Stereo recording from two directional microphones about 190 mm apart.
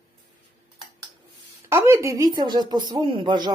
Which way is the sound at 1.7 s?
15° right (ahead or behind).